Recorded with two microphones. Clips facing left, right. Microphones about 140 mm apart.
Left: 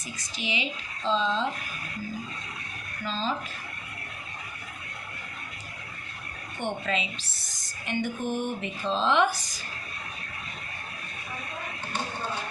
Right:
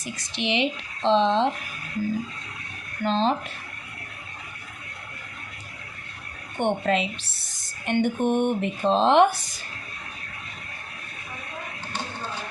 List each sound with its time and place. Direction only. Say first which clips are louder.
0.0 s speech: right 6 dB; 70° right (ahead or behind)
3.0 s speech: right 8 dB; 65° right (ahead or behind)
6.6 s speech: right 7 dB; 60° right (ahead or behind)